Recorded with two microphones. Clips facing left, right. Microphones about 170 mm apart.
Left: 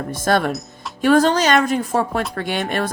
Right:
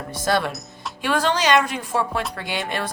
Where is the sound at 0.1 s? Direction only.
50° left (ahead or behind).